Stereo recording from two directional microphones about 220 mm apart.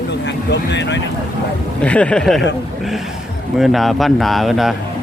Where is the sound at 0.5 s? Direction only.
50° left (ahead or behind).